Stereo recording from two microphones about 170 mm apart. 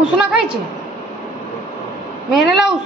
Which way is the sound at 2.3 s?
Centre (ahead or behind).